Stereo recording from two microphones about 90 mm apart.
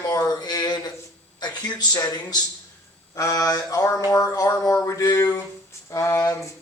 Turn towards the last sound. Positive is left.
turn(degrees=35)  # may be behind; listen again after turning